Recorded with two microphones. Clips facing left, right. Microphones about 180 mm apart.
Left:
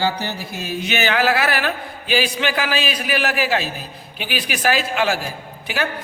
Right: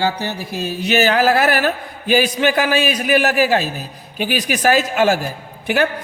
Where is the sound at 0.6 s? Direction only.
40° right (ahead or behind).